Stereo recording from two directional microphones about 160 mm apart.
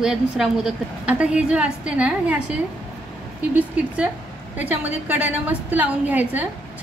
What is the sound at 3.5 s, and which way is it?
A woman's voice, 10° right (ahead or behind).